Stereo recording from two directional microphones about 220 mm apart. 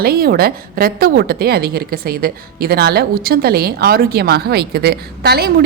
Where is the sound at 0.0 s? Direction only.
45° right (ahead or behind).